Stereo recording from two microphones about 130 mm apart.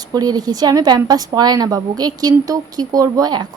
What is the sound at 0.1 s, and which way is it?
A woman's voice, 30° right (ahead or behind).